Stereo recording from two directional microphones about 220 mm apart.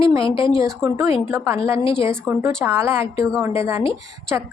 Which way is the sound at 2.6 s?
10° right (ahead or behind).